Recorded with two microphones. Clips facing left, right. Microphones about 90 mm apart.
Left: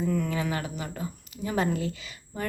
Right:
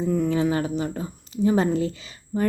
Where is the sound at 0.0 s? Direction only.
25° right (ahead or behind).